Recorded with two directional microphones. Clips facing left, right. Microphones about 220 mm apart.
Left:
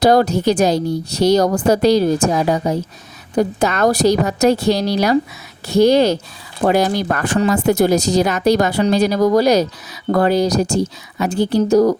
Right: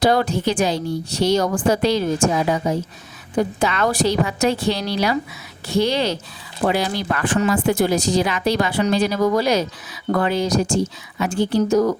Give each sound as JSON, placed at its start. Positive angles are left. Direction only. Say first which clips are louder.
{"t": 0.0, "sound": "a woman's voice", "louder": "left 5 dB", "side_deg": 40}